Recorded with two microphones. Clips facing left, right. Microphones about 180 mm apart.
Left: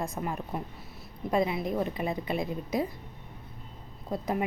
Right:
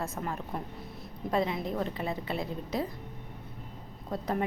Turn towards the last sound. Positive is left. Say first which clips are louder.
# left 1 dB
turn(degrees=10)  # may be behind; listen again after turning